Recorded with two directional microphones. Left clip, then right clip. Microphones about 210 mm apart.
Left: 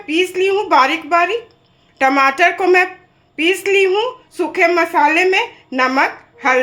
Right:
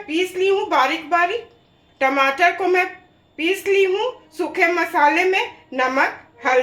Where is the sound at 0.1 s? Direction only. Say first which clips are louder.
Left 4 dB; 50° left (ahead or behind).